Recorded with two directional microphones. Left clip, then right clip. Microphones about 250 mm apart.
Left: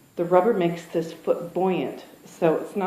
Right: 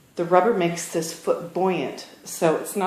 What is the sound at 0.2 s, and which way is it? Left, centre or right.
Speech, right.